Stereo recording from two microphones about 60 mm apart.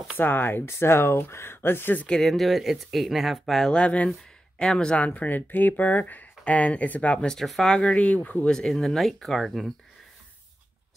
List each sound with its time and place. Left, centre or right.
0.2 s speech: left
2.0 s speech: centre
3.7 s speech: left
4.9 s speech: left
7.4 s speech: centre
7.7 s speech: left
8.5 s speech: centre